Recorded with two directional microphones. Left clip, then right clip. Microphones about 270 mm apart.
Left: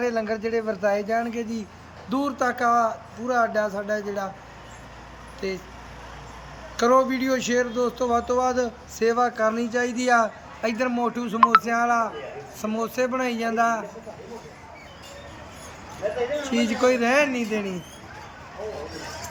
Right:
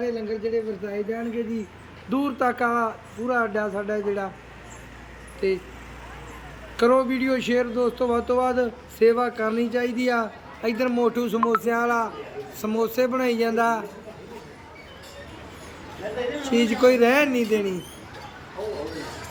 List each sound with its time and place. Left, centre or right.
0.0 s speech: centre
5.4 s speech: centre
6.7 s speech: centre
16.5 s speech: centre